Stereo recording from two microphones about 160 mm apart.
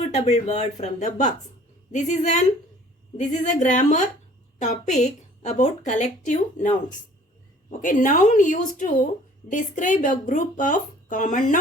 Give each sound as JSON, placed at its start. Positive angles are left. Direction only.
{"t": 0.0, "sound": "a woman's voice", "side_deg": 45}